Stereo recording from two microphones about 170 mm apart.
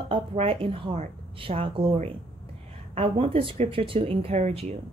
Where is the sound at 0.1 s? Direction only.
30° right (ahead or behind).